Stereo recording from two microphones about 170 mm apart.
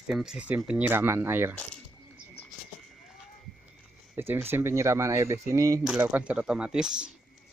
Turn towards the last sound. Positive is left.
turn(degrees=-5)  # may be behind; listen again after turning